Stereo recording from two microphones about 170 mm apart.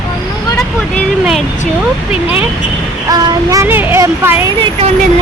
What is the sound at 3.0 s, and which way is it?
Speech, 20° right (ahead or behind).